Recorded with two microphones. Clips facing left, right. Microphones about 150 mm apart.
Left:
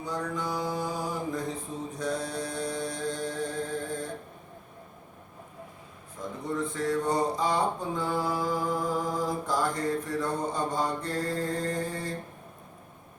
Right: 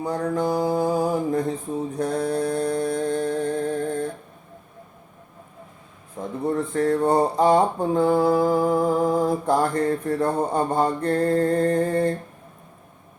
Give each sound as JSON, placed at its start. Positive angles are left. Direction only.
{"t": 0.0, "sound": "a sound", "side_deg": -60}
{"t": 2.0, "sound": "mantra", "side_deg": -60}
{"t": 6.1, "sound": "speech", "side_deg": -60}